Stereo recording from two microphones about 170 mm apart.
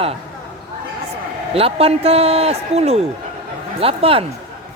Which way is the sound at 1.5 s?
35° right (ahead or behind).